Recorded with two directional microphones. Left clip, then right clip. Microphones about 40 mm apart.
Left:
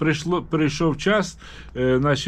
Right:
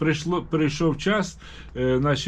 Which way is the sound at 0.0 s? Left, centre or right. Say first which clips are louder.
Left 2 dB; left.